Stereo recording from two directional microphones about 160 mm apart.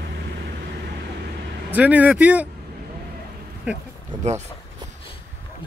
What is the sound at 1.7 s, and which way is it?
Speech, 10° right (ahead or behind).